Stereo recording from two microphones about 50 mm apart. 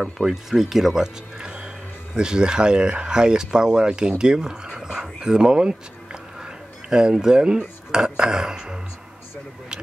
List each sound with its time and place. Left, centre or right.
0.0 s speech: centre
1.0 s speech: centre